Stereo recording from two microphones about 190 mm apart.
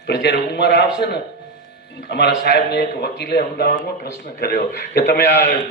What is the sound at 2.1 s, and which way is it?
A man's voice, 60° left (ahead or behind).